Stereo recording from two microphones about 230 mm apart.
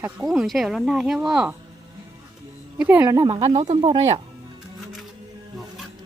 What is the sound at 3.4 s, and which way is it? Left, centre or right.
Speech, right.